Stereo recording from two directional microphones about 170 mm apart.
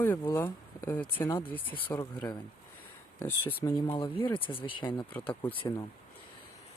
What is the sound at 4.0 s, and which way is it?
Speech, 30° left (ahead or behind).